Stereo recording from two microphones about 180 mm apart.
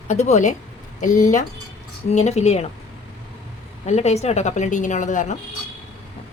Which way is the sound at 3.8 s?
40° left (ahead or behind).